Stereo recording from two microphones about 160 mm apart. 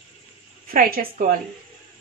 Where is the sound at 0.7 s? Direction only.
65° right (ahead or behind).